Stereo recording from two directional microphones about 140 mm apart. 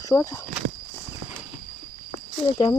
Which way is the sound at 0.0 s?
25° left (ahead or behind).